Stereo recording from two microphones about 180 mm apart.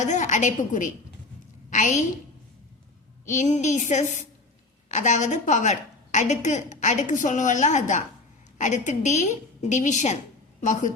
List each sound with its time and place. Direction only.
0.0 s a woman's voice: 40° left (ahead or behind)
3.2 s a woman's voice: 40° left (ahead or behind)